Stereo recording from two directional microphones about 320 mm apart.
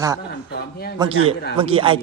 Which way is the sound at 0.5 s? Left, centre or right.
Left.